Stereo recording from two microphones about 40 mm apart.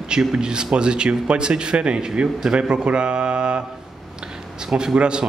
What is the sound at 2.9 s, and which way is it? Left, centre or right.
Mantra, right.